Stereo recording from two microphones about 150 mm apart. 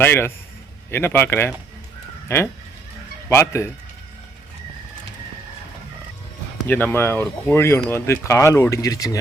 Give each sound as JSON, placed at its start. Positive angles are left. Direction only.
{"t": 0.0, "sound": "speech", "side_deg": 15}
{"t": 6.7, "sound": "speech", "side_deg": 10}